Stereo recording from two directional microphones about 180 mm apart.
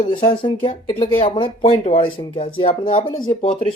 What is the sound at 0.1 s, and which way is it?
Speech, 30° left (ahead or behind).